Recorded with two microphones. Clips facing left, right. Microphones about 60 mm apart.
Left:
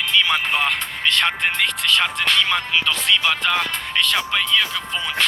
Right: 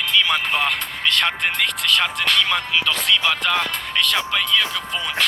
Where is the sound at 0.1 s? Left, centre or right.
Left.